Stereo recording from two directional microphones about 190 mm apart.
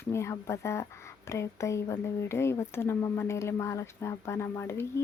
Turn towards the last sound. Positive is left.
turn(degrees=15)  # may be behind; listen again after turning